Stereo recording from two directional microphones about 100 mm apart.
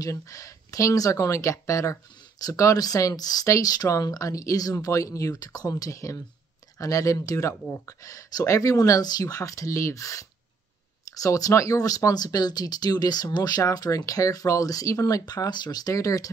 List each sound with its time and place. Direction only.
0.0 s speech: 35° left (ahead or behind)